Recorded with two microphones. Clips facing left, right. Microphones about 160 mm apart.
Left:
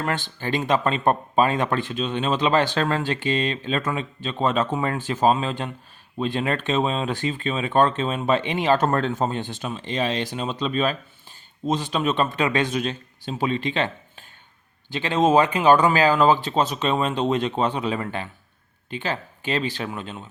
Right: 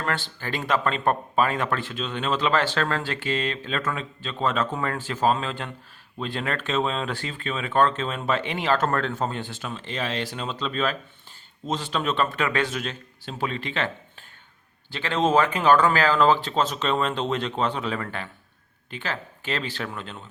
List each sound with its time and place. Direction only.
0.0 s speech: 20° left (ahead or behind)
14.9 s speech: 15° left (ahead or behind)